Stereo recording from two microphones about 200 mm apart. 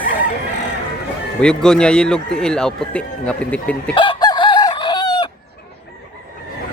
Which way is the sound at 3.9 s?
25° left (ahead or behind).